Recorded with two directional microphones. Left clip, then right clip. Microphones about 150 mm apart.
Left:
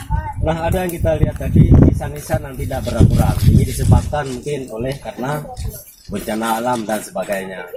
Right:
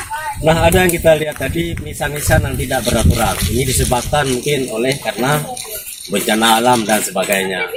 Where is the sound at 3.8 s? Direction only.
5° left (ahead or behind).